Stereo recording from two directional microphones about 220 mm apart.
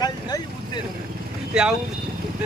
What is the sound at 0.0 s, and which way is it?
Vehicle, 20° left (ahead or behind).